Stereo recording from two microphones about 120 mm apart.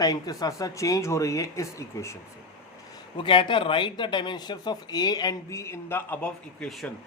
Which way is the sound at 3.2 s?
40° left (ahead or behind).